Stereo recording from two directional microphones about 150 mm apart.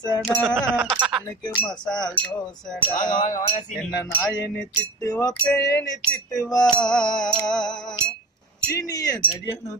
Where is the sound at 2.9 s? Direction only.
60° left (ahead or behind).